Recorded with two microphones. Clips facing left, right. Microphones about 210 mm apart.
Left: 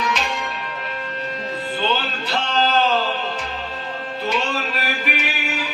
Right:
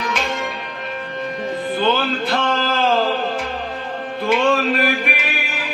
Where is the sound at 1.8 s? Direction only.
55° right (ahead or behind).